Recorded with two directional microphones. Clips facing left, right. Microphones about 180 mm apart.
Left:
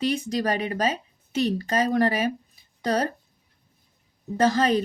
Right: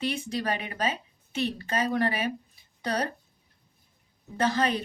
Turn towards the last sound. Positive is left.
turn(degrees=40)  # may be behind; listen again after turning